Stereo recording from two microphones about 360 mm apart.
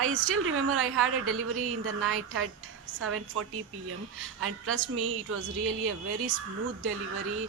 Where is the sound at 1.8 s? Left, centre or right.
Right.